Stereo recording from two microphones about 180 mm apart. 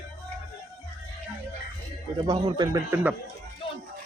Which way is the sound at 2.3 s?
25° right (ahead or behind).